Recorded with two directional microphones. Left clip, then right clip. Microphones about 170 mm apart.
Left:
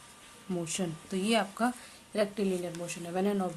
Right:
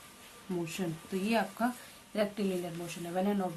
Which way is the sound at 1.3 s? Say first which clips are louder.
Left 3 dB; 60° left (ahead or behind).